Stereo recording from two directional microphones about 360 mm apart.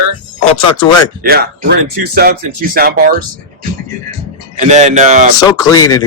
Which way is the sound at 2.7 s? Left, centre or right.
Right.